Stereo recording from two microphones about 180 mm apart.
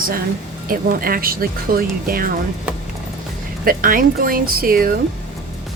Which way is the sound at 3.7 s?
50° right (ahead or behind).